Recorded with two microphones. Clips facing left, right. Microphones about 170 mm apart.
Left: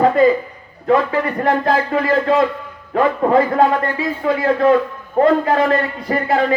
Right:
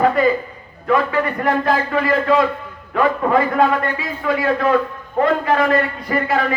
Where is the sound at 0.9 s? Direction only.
30° left (ahead or behind).